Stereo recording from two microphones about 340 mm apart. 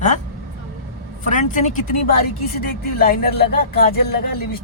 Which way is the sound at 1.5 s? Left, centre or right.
Left.